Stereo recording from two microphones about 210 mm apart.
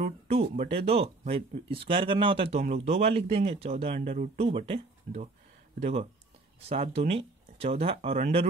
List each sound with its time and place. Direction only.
0.0 s speech: 30° right (ahead or behind)